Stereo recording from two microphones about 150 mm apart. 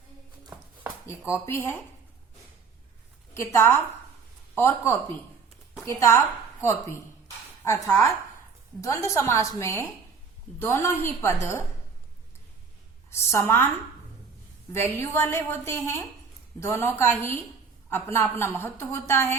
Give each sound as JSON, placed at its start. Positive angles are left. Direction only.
{"t": 1.3, "sound": "a woman's voice", "side_deg": 15}
{"t": 3.3, "sound": "a woman's voice", "side_deg": 15}
{"t": 13.1, "sound": "a woman's voice", "side_deg": 15}
{"t": 14.7, "sound": "a woman's voice", "side_deg": 15}